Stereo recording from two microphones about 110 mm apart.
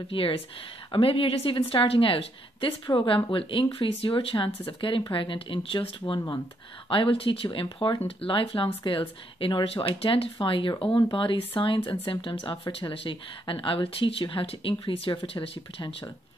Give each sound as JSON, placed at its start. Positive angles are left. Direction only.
{"t": 0.1, "sound": "speech", "side_deg": 55}